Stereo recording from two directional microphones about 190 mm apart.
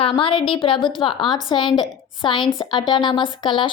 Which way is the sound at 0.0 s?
25° left (ahead or behind).